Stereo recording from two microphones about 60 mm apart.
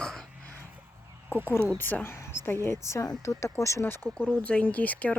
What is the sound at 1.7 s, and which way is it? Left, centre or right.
Speech, left.